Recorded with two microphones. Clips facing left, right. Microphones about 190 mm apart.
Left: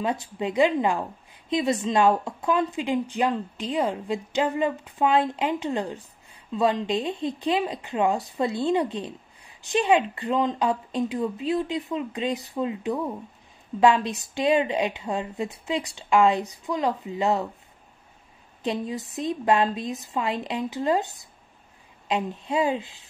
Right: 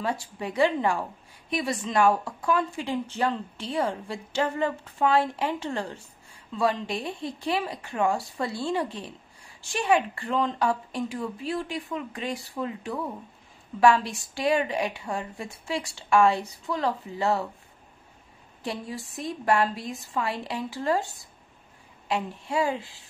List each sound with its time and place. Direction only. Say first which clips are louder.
0.0 s a woman's voice: left 3 dB; 20° left (ahead or behind)
18.6 s a woman's voice: left 5 dB; 20° left (ahead or behind)